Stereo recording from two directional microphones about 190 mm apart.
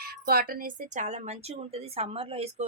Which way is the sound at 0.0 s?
50° right (ahead or behind).